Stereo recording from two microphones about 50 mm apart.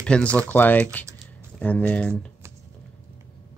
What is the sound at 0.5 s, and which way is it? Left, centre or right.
Speech, left.